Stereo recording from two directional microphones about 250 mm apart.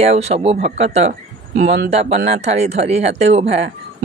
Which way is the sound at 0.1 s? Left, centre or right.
Right.